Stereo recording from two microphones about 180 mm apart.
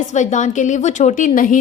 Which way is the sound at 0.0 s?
40° left (ahead or behind).